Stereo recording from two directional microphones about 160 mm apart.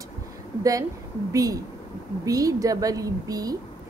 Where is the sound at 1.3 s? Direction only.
20° right (ahead or behind).